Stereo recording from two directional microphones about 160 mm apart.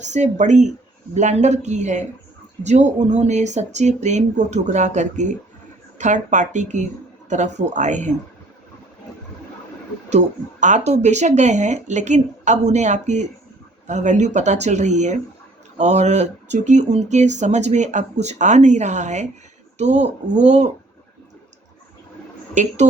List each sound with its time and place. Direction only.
0.0 s speech: 45° right (ahead or behind)
10.1 s speech: 45° right (ahead or behind)
22.6 s speech: 50° right (ahead or behind)